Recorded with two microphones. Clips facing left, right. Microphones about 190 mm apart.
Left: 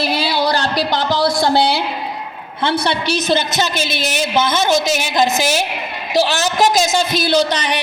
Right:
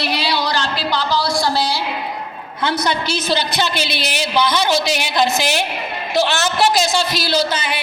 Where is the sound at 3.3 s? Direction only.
50° left (ahead or behind).